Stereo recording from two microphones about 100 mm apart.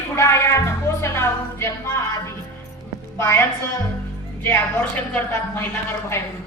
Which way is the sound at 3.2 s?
25° left (ahead or behind).